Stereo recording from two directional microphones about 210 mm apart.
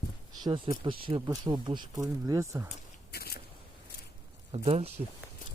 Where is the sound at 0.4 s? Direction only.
20° right (ahead or behind).